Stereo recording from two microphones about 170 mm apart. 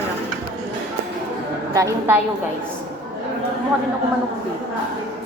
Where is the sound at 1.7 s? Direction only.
20° right (ahead or behind).